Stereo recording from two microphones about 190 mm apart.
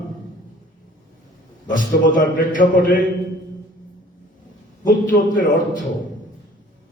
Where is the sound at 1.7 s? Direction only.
45° left (ahead or behind).